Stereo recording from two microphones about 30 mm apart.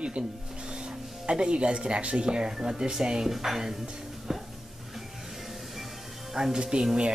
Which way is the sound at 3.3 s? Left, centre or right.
Centre.